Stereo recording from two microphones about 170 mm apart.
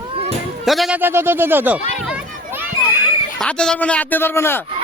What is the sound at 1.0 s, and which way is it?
Speech, 15° right (ahead or behind).